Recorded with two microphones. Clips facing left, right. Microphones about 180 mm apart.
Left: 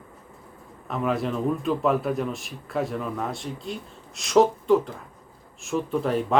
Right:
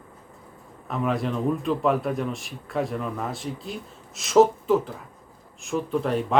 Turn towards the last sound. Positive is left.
turn(degrees=0)  # may be behind; listen again after turning